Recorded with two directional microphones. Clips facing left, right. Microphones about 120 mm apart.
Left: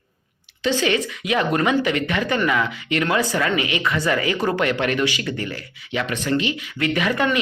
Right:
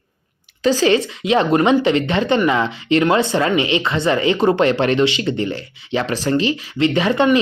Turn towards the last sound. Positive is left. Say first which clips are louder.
# right 5 dB
turn(degrees=-30)  # may be behind; listen again after turning